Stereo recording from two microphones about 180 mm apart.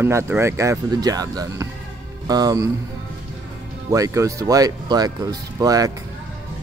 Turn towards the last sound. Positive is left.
turn(degrees=-20)  # may be behind; listen again after turning